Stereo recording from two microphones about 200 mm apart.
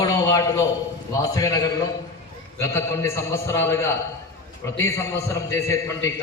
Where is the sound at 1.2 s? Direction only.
15° left (ahead or behind).